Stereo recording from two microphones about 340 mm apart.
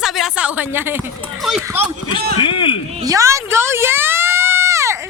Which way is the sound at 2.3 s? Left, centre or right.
Centre.